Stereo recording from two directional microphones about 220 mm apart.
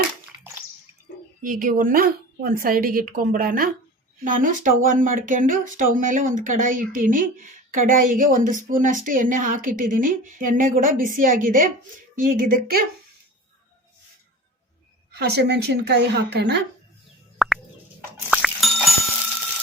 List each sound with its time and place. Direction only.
1.4 s speech: 40° right (ahead or behind)
15.1 s speech: 50° right (ahead or behind)
17.3 s plop: centre (ahead or behind)
18.3 s a sound: centre (ahead or behind)